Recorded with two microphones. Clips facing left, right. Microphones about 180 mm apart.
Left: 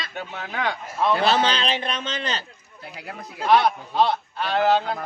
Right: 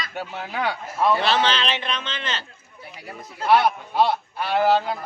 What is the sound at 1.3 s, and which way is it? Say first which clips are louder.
A man's voice: left 1 dB; 40° left (ahead or behind).